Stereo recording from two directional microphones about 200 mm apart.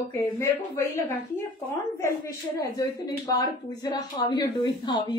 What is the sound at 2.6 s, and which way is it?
Speech, 15° left (ahead or behind).